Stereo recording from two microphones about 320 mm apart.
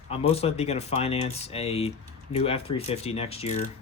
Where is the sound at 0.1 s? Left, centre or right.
Centre.